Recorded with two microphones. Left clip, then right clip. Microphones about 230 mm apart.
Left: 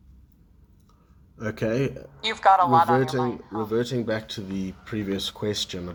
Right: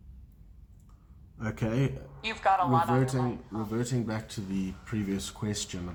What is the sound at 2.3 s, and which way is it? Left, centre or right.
Speech, left.